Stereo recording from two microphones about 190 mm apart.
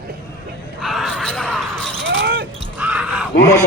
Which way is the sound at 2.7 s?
5° right (ahead or behind).